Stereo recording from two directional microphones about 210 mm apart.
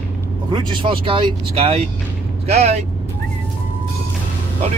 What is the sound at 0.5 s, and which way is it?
Speech, 25° right (ahead or behind).